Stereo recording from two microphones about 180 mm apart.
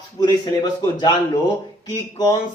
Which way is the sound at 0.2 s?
25° left (ahead or behind).